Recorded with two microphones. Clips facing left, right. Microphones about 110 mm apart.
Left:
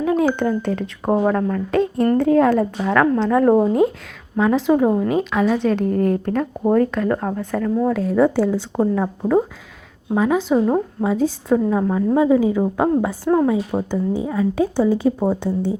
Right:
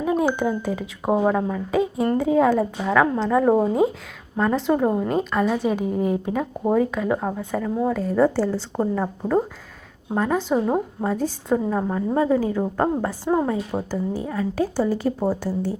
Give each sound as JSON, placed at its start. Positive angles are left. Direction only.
{"t": 0.0, "sound": "a sound", "side_deg": -5}
{"t": 0.3, "sound": "a woman's voice", "side_deg": -5}
{"t": 8.5, "sound": "speech", "side_deg": 15}
{"t": 10.2, "sound": "a woman's voice", "side_deg": 5}